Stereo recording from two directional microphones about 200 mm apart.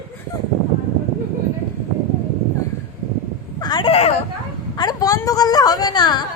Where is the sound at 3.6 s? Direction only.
20° left (ahead or behind).